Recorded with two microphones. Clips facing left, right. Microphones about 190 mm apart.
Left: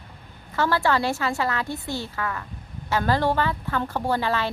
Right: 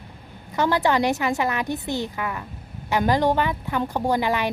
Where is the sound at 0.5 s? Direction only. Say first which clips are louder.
Right 2 dB; 20° right (ahead or behind).